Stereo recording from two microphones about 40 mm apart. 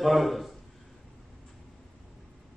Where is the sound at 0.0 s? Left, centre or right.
Centre.